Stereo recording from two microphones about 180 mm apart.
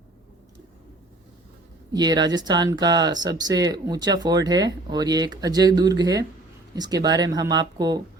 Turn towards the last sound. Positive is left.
turn(degrees=-20)  # may be behind; listen again after turning